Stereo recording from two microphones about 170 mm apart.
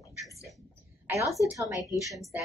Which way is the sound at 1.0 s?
15° right (ahead or behind).